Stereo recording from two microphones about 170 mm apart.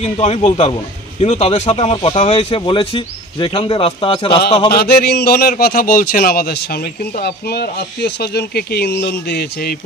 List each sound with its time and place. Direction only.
0.0 s speech: 40° left (ahead or behind)
4.7 s a man's voice: 70° left (ahead or behind)